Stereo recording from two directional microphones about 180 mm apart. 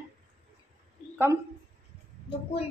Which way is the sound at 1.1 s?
10° right (ahead or behind).